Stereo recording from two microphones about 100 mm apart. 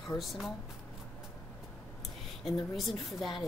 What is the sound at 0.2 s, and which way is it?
Speech, centre (ahead or behind).